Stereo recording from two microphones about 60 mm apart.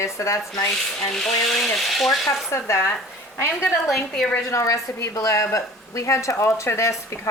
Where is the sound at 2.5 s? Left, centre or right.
Left.